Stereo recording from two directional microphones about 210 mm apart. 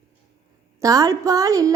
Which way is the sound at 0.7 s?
15° right (ahead or behind).